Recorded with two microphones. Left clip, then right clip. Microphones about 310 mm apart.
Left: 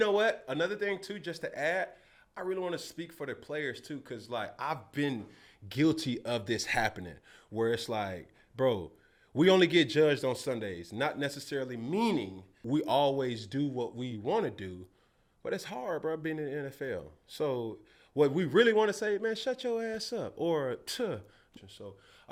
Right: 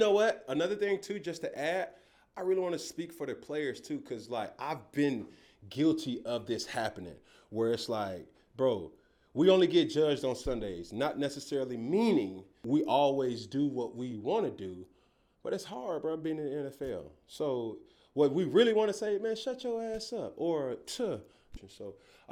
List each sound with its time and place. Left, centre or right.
0.0 s speech: left
5.7 s speech: left
21.6 s speech: left